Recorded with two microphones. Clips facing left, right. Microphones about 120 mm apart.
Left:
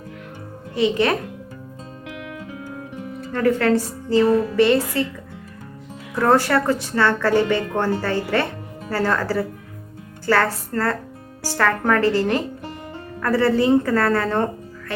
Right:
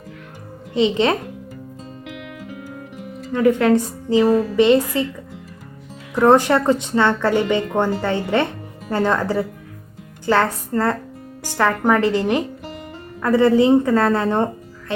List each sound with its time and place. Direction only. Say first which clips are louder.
0.7 s a woman's voice: right 2 dB; 20° right (ahead or behind)
3.3 s a woman's voice: right 3 dB; 15° right (ahead or behind)
6.1 s a woman's voice: right 3 dB; 20° right (ahead or behind)